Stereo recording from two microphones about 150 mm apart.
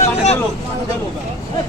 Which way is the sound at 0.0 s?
45° left (ahead or behind).